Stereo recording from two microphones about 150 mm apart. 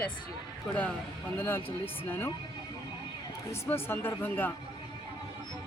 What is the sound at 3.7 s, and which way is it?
Speech, 15° left (ahead or behind).